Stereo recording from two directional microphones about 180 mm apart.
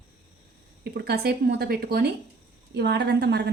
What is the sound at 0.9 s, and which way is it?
Speech, 60° right (ahead or behind).